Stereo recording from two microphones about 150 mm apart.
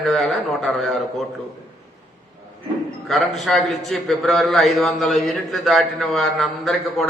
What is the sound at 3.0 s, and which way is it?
A man's voice, centre (ahead or behind).